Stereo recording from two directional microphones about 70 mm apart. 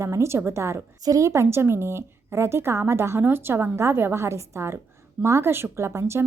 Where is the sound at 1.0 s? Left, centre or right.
Right.